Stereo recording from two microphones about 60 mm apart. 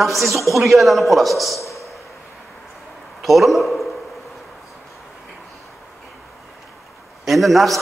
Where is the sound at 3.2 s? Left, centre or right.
Centre.